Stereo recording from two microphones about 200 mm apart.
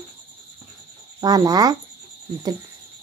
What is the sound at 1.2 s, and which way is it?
Speech, 20° right (ahead or behind).